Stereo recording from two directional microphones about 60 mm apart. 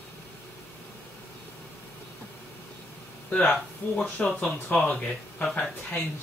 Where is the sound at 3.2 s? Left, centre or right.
Left.